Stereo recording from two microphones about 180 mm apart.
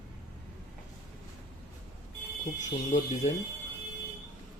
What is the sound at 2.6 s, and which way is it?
Speech, 40° left (ahead or behind).